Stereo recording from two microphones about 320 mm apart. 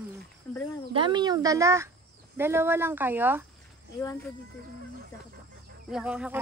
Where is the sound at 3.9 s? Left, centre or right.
Centre.